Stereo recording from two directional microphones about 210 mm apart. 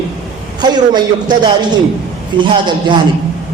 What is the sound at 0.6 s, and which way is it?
A man's voice, 20° right (ahead or behind).